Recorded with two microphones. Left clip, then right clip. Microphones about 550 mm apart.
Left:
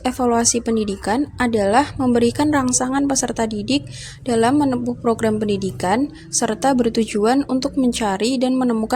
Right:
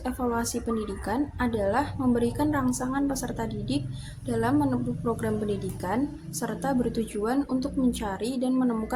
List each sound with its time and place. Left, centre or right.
0.0 s a woman's voice: centre